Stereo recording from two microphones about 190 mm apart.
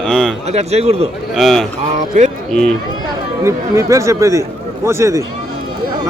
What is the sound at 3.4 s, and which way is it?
Speech, 15° right (ahead or behind).